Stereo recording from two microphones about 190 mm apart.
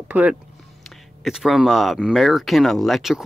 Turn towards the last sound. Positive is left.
turn(degrees=0)  # may be behind; listen again after turning